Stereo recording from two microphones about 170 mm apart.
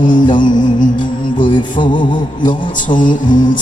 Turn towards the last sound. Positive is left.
turn(degrees=50)  # may be behind; listen again after turning